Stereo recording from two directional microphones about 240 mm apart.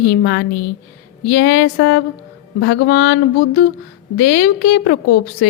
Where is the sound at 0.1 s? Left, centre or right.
Left.